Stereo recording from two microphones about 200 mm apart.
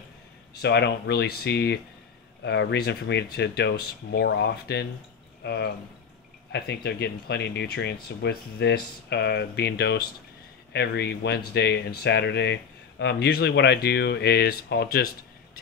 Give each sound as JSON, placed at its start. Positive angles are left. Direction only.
{"t": 0.6, "sound": "speech", "side_deg": 60}